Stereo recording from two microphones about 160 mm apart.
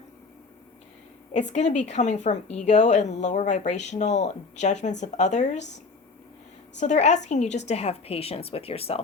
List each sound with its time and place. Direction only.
1.3 s speech: 45° left (ahead or behind)
6.7 s a woman's voice: 45° left (ahead or behind)